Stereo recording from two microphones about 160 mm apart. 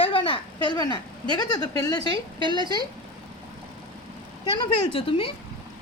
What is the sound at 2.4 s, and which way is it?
Speech, 30° right (ahead or behind).